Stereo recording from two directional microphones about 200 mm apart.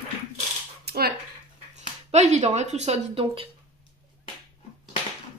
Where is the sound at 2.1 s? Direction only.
35° right (ahead or behind).